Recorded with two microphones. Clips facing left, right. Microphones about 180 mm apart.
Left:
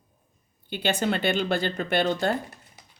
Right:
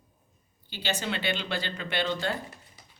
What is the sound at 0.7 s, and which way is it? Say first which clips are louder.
Speech: left 7 dB; 55° left (ahead or behind).